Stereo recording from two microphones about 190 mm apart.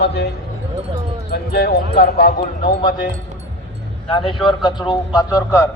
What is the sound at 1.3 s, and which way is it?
A man's voice, 55° left (ahead or behind).